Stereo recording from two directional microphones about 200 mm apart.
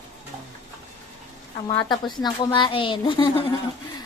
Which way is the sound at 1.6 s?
20° left (ahead or behind).